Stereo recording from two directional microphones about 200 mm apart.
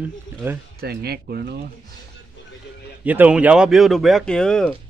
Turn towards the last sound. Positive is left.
turn(degrees=5)  # may be behind; listen again after turning